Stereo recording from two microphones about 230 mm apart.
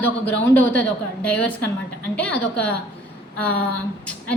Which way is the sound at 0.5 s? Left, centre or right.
Centre.